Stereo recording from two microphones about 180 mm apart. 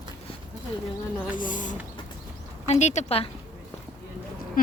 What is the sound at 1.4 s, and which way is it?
Speech, 45° left (ahead or behind).